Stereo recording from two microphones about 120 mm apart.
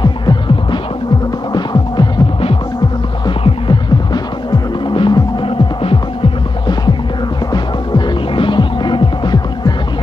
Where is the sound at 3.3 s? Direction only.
40° left (ahead or behind).